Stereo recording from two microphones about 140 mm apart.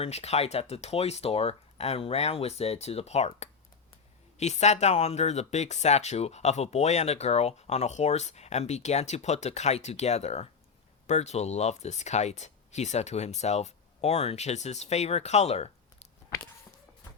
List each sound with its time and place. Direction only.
0.0 s speech: 50° left (ahead or behind)